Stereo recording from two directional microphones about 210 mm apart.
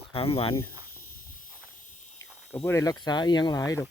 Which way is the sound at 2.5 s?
10° left (ahead or behind).